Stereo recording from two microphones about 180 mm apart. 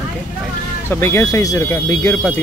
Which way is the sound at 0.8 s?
15° left (ahead or behind).